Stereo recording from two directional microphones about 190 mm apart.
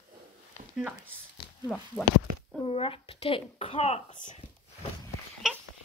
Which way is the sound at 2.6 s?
30° left (ahead or behind).